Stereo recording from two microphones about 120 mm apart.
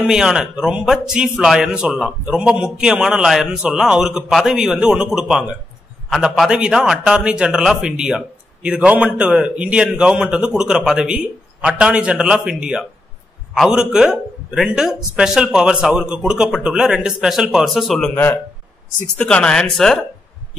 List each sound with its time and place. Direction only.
0.0 s a man's voice: 5° right (ahead or behind)
18.1 s speech: 15° left (ahead or behind)